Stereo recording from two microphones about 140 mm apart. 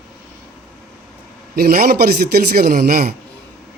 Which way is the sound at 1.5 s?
90° right.